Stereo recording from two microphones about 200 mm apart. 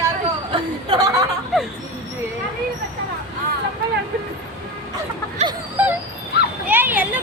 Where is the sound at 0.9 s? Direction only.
20° right (ahead or behind).